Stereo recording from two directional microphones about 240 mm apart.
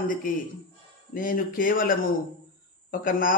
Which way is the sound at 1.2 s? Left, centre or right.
Left.